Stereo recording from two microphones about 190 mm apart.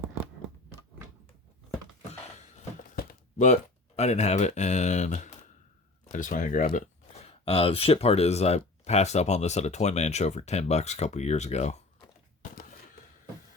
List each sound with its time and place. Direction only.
2.9 s speech: 50° left (ahead or behind)